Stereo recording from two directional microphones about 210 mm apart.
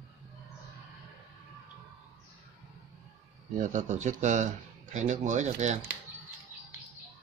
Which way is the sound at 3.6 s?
35° right (ahead or behind).